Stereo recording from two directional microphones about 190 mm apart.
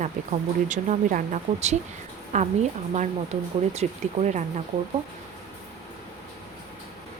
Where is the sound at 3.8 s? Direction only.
40° right (ahead or behind).